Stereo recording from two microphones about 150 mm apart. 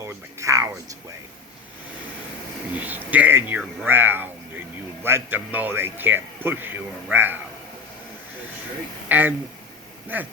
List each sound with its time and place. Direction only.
0.0 s a sound: 20° right (ahead or behind)
2.7 s speech: 10° right (ahead or behind)
9.0 s speech: 10° right (ahead or behind)